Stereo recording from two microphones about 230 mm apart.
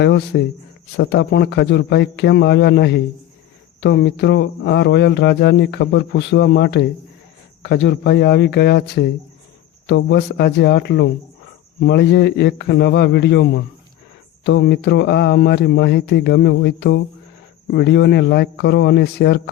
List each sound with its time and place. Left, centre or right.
0.0 s speech: left